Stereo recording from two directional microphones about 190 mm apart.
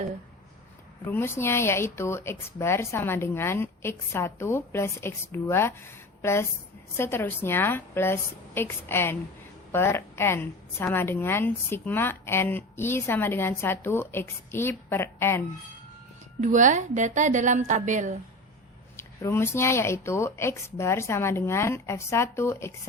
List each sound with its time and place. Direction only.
1.0 s a woman's voice: 10° left (ahead or behind)
16.4 s a woman's voice: 40° right (ahead or behind)
18.9 s a woman's voice: 10° left (ahead or behind)